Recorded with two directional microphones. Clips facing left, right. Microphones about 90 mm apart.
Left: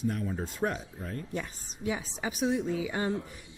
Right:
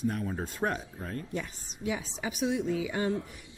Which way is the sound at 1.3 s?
35° left (ahead or behind).